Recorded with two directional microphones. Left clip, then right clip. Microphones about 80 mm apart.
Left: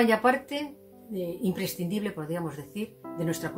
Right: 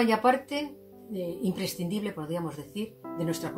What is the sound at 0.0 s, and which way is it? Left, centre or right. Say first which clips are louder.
Speech: left 1 dB; left.